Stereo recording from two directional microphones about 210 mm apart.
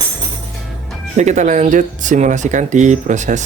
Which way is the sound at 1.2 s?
35° right (ahead or behind).